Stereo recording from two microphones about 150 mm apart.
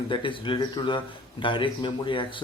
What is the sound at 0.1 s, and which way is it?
Speech, 35° left (ahead or behind).